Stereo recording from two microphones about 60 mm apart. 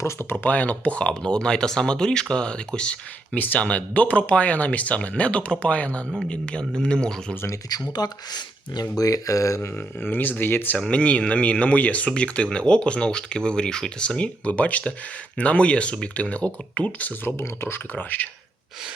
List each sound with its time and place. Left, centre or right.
0.0 s speech: left; by 3.0 s centre
3.3 s speech: left
8.0 s speech: left
9.6 s speech: left
10.8 s speech: centre
17.2 s speech: left
17.9 s speech: left